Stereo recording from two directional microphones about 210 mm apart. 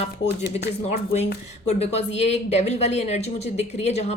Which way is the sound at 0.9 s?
30° left (ahead or behind).